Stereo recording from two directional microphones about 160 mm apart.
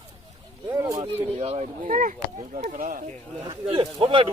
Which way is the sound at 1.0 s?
40° right (ahead or behind).